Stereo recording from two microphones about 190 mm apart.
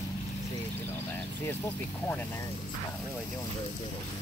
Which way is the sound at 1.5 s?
10° left (ahead or behind).